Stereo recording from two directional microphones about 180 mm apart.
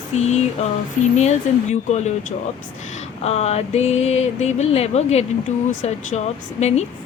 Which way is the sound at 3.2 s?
35° left (ahead or behind).